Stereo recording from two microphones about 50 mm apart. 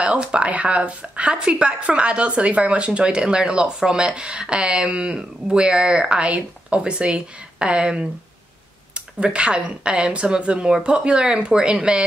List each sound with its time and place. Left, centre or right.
0.0 s a woman's voice: right